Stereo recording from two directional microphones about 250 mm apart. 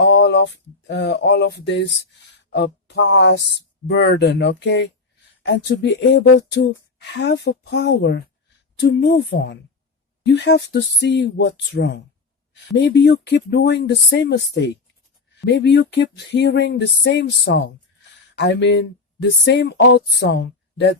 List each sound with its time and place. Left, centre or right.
0.0 s speech: left